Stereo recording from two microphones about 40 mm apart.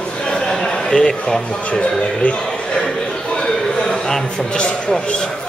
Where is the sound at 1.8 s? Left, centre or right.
Left.